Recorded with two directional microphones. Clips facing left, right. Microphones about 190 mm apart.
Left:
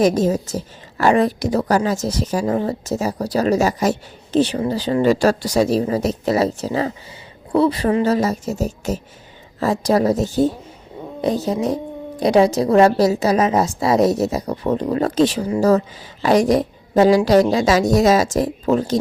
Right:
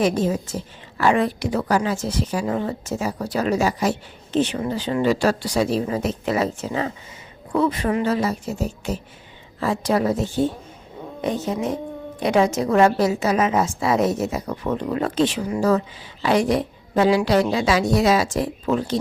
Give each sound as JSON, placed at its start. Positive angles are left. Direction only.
{"t": 0.0, "sound": "a woman's voice", "side_deg": 40}